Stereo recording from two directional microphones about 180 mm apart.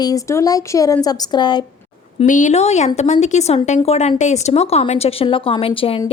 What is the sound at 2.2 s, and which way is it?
A woman's voice, 45° left (ahead or behind).